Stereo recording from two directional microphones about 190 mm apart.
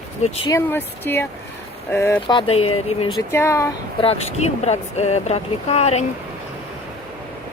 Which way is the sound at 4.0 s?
30° left (ahead or behind).